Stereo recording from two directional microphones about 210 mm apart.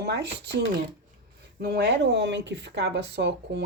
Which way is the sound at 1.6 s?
50° right (ahead or behind).